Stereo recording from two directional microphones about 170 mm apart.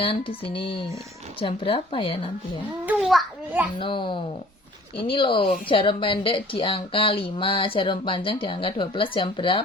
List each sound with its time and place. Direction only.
0.0 s speech: 30° left (ahead or behind)
2.8 s a child's voice: 5° right (ahead or behind)
3.8 s a child's voice: 30° left (ahead or behind)